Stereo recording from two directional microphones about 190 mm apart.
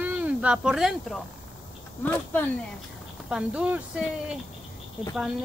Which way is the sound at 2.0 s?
10° left (ahead or behind).